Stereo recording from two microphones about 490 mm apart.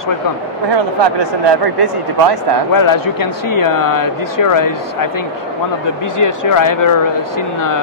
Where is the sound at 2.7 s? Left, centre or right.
Left.